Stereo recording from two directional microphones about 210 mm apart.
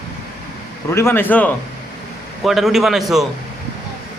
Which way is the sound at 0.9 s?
10° left (ahead or behind).